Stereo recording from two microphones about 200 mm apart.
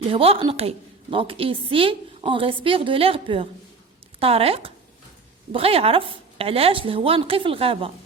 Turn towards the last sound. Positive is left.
turn(degrees=-30)  # may be behind; listen again after turning